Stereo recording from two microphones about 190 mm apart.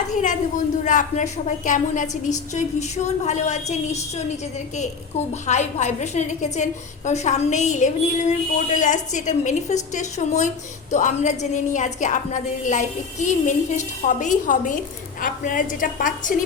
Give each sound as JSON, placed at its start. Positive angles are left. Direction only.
{"t": 0.1, "sound": "a woman's voice", "side_deg": 40}
{"t": 5.3, "sound": "a woman's voice", "side_deg": 35}